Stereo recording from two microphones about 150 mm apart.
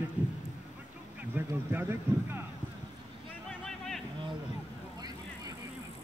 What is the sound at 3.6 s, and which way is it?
Vehicle, centre (ahead or behind).